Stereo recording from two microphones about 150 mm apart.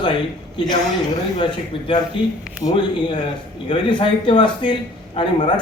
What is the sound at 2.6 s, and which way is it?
A man's voice, 35° left (ahead or behind).